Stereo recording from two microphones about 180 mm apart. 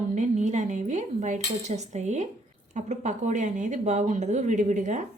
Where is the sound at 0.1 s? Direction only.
40° right (ahead or behind).